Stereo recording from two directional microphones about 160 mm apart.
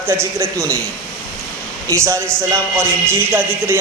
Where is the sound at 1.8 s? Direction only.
20° right (ahead or behind).